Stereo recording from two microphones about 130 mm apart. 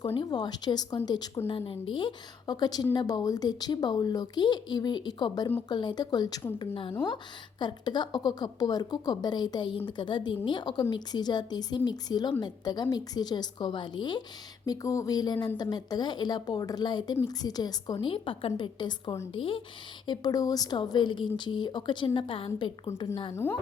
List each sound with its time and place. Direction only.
0.0 s a woman's voice: 35° left (ahead or behind)
6.6 s a woman's voice: 40° left (ahead or behind)
18.1 s a woman's voice: 40° left (ahead or behind)
20.1 s a woman's voice: 30° left (ahead or behind)
23.3 s a woman's voice: 15° left (ahead or behind)